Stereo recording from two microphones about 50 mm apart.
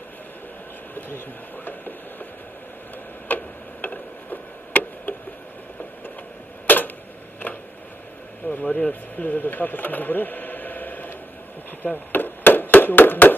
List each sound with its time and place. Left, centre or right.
0.9 s speech: left
3.3 s tick-tock: left
6.7 s a sound: left
8.5 s speech: left
9.2 s speech: left
11.8 s chop: left
12.7 s a sound: left